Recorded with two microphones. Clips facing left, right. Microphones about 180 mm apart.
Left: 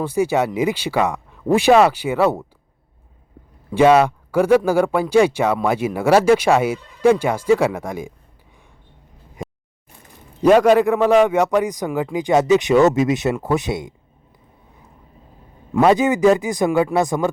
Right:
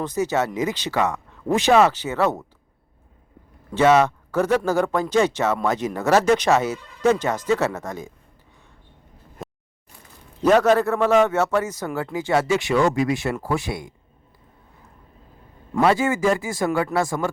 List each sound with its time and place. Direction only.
0.0 s speech: 10° left (ahead or behind)
3.8 s speech: 10° left (ahead or behind)
9.4 s a sound: centre (ahead or behind)
10.4 s speech: 10° left (ahead or behind)
15.8 s speech: 20° left (ahead or behind)